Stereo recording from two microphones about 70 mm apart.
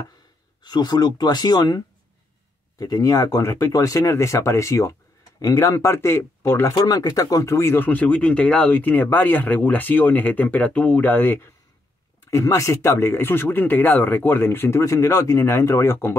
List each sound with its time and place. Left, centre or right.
0.6 s speech: left
2.8 s speech: left
6.8 s speech: left
7.7 s speech: left
12.3 s speech: left